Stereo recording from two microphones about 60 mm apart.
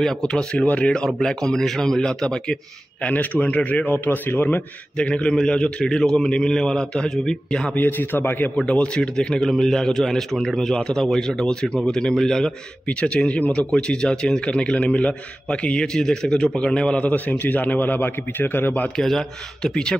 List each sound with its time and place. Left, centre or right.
0.3 s speech: centre
3.0 s a man's voice: left
4.9 s speech: centre
7.7 s a man's voice: left
8.6 s speech: centre
12.8 s speech: centre
17.1 s a man's voice: left
18.9 s speech: centre